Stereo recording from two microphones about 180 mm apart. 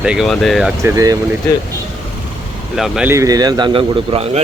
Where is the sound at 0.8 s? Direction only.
20° right (ahead or behind).